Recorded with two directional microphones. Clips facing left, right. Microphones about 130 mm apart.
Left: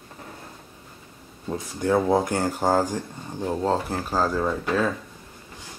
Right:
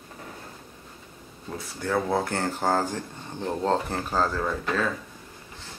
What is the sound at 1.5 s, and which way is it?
Speech, 15° left (ahead or behind).